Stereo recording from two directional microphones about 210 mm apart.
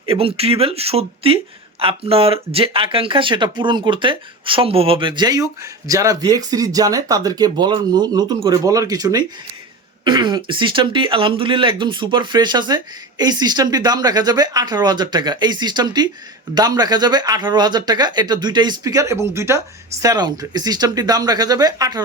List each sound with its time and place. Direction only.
0.0 s speech: 25° right (ahead or behind)